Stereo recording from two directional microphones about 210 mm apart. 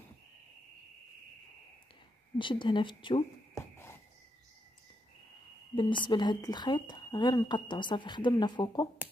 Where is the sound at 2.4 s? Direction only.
25° left (ahead or behind).